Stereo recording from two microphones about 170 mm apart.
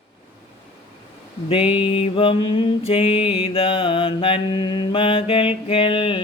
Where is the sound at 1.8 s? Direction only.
30° left (ahead or behind).